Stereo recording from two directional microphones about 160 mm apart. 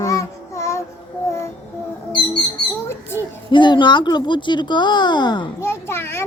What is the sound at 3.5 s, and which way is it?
Speech, 30° left (ahead or behind).